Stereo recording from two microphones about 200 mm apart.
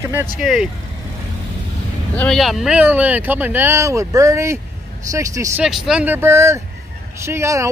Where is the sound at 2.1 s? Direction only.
Centre (ahead or behind).